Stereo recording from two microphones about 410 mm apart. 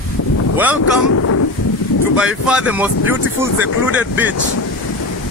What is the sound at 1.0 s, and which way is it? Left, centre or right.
Speech, left.